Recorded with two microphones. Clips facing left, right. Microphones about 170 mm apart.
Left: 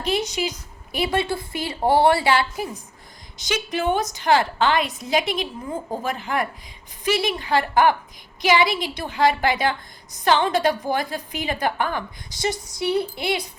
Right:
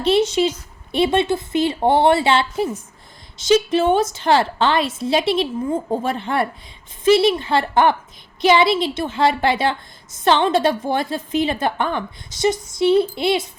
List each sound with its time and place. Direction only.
0.1 s a woman's voice: 25° right (ahead or behind)